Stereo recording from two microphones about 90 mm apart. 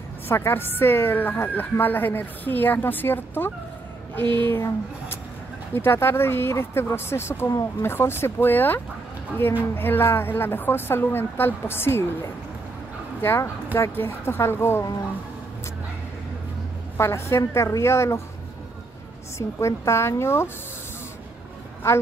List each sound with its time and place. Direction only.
0.3 s a woman's voice: 25° left (ahead or behind)
5.8 s a woman's voice: 25° left (ahead or behind)
13.2 s a woman's voice: 25° left (ahead or behind)
16.9 s a woman's voice: 30° left (ahead or behind)
19.3 s a woman's voice: 30° left (ahead or behind)